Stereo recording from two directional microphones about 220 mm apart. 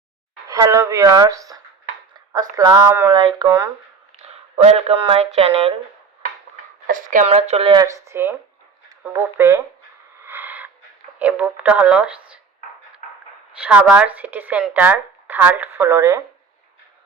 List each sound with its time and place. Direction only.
0.5 s speech: 15° right (ahead or behind)
4.2 s speech: 30° right (ahead or behind)
6.8 s speech: 40° right (ahead or behind); by 9.6 s 10° right (ahead or behind)
10.2 s owl: 10° right (ahead or behind)
11.2 s speech: 5° right (ahead or behind)
13.6 s speech: 5° right (ahead or behind)